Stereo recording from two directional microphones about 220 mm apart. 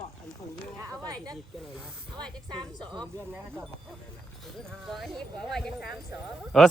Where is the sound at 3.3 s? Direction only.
10° right (ahead or behind).